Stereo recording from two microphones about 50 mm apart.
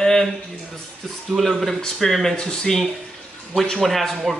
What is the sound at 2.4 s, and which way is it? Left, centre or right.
Dishes, centre.